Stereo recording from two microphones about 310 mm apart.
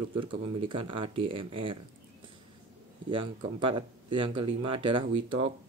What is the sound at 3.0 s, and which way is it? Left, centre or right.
Speech, centre.